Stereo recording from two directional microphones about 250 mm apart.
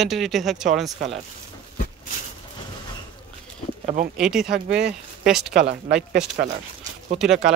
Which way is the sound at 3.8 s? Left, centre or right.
Right.